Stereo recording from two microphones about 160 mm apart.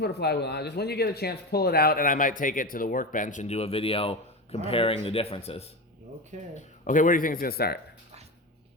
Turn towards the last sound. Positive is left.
turn(degrees=75)  # may be behind; listen again after turning